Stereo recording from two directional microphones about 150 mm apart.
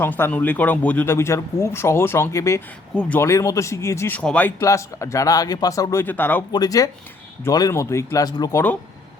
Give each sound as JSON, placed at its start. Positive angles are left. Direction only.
{"t": 0.0, "sound": "speech", "side_deg": 10}
{"t": 4.6, "sound": "speech", "side_deg": 20}
{"t": 6.5, "sound": "speech", "side_deg": 25}